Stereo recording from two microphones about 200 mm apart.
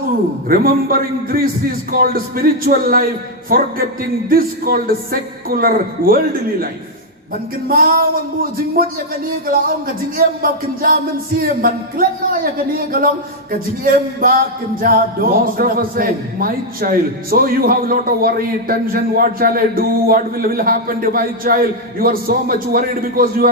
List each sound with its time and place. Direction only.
0.4 s speech: 45° right (ahead or behind)
7.7 s speech: 45° right (ahead or behind)
13.5 s speech: 45° right (ahead or behind)